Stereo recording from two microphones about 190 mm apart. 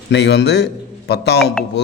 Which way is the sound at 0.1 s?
65° left (ahead or behind).